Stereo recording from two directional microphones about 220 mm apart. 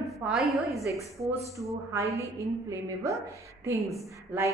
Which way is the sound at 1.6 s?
15° right (ahead or behind).